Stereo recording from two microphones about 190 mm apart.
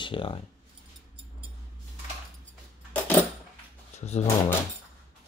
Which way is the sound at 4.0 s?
35° left (ahead or behind).